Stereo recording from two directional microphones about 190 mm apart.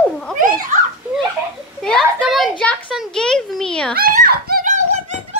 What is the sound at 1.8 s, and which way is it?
A child's voice, centre (ahead or behind).